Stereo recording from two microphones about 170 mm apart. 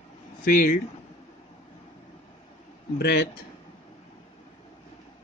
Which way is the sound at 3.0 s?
70° left (ahead or behind).